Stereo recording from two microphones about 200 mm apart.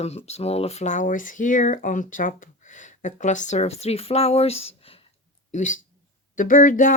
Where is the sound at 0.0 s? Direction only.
30° left (ahead or behind).